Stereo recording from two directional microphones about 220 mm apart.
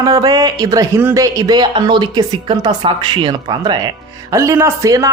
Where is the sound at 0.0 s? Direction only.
15° right (ahead or behind).